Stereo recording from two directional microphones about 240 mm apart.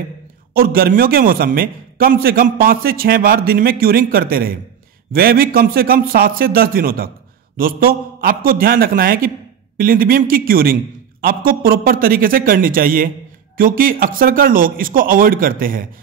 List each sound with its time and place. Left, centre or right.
0.6 s a man's voice: right